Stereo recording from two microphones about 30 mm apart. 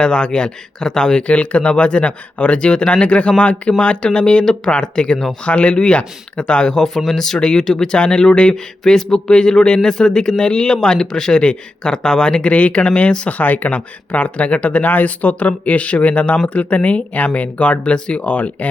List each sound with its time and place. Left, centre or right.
0.0 s speech: left
1.3 s speech: left
5.5 s speech: left
6.7 s speech: centre
7.3 s speech: left
7.9 s speech: left
8.8 s speech: centre
12.4 s speech: left
13.2 s speech: left
14.8 s speech: left